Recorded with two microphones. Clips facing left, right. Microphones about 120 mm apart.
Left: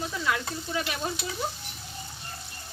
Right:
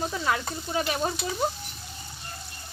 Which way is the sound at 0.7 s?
35° right (ahead or behind).